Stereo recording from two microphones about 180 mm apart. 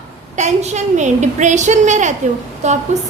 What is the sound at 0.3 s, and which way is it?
A woman's voice, 40° right (ahead or behind).